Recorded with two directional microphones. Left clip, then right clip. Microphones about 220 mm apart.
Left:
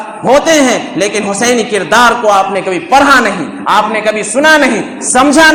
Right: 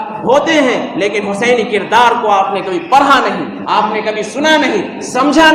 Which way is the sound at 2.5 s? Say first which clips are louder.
Left 2 dB; 40° left (ahead or behind).